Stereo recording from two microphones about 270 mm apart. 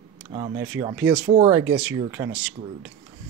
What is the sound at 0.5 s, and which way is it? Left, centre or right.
Speech, centre.